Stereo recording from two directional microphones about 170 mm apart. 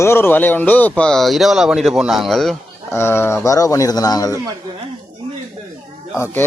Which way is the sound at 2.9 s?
15° left (ahead or behind).